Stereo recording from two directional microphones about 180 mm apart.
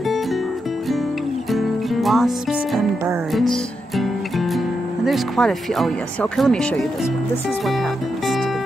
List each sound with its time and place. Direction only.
1.5 s music: centre (ahead or behind)
5.0 s speech: centre (ahead or behind)